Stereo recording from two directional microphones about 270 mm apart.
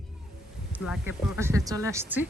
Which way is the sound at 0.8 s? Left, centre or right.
Centre.